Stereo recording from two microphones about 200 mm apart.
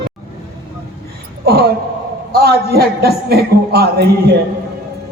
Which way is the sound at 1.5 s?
50° right (ahead or behind).